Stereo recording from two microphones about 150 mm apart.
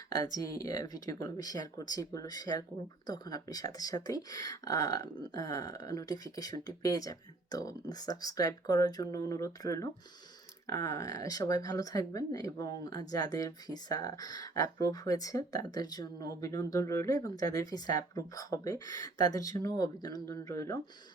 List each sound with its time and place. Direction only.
0.1 s speech: 25° left (ahead or behind)